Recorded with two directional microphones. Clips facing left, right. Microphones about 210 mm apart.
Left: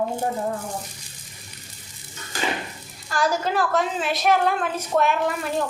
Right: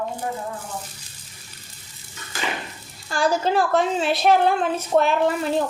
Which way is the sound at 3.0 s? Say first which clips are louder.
Right 2 dB; 30° right (ahead or behind).